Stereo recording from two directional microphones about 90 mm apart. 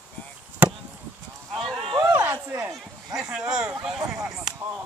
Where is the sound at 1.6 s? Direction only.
5° left (ahead or behind).